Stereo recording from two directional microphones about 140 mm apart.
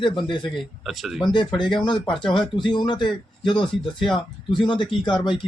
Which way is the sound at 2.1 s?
Centre (ahead or behind).